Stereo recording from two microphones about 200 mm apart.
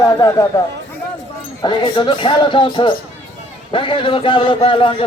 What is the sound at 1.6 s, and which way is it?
A man's voice, 20° left (ahead or behind).